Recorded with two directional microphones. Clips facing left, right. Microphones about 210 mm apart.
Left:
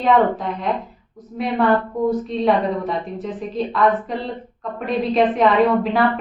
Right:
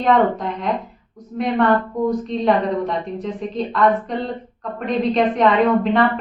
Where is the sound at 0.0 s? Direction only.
Centre (ahead or behind).